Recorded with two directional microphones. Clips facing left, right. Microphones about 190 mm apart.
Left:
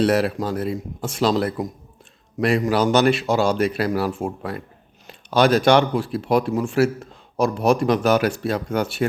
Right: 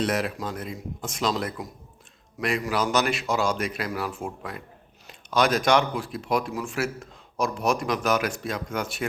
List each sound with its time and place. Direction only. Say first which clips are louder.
0.0 s speech: left 7 dB; 35° left (ahead or behind)